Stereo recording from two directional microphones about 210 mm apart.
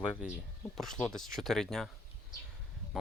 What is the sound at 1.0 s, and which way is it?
Speech, centre (ahead or behind).